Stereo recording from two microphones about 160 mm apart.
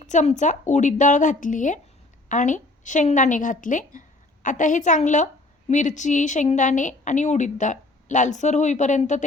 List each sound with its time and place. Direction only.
0.0 s a woman's voice: 45° left (ahead or behind)